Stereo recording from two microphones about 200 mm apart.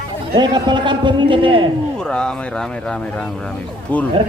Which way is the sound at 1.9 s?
5° left (ahead or behind).